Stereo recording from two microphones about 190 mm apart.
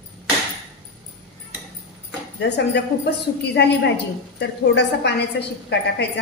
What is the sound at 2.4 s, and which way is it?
Speech, 65° left (ahead or behind).